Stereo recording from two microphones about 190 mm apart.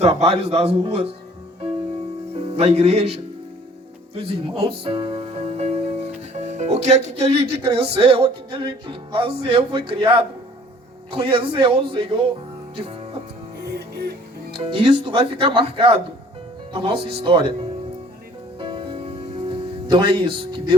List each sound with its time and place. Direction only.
0.0 s speech: 30° right (ahead or behind)
2.3 s speech: 30° right (ahead or behind)
4.8 s music: 30° right (ahead or behind)
6.3 s speech: 35° right (ahead or behind)
13.7 s music: 60° right (ahead or behind)
14.5 s speech: 30° right (ahead or behind)
18.6 s music: 25° right (ahead or behind)
19.5 s speech: 25° right (ahead or behind)